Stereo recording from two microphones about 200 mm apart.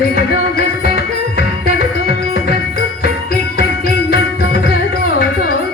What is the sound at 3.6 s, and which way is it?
Music, 50° left (ahead or behind).